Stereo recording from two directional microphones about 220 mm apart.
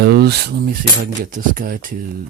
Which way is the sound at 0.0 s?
45° right (ahead or behind).